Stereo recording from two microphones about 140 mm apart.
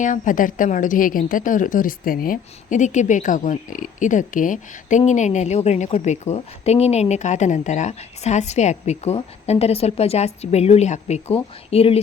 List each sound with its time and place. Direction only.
0.0 s a woman's voice: 70° left (ahead or behind); by 11.9 s 45° left (ahead or behind)